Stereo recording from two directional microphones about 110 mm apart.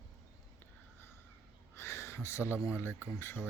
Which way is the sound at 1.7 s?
25° left (ahead or behind).